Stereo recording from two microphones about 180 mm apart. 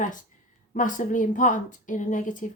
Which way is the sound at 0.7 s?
45° left (ahead or behind).